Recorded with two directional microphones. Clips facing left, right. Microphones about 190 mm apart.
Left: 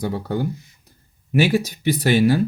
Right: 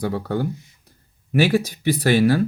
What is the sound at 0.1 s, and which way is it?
Speech, 15° left (ahead or behind).